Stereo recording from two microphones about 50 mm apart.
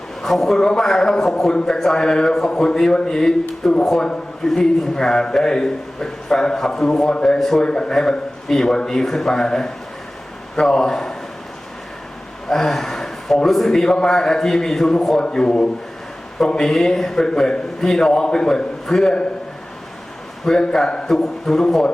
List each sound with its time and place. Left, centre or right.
0.2 s a man's voice: centre
7.6 s a man's voice: centre
12.5 s a man's voice: centre
20.4 s a man's voice: centre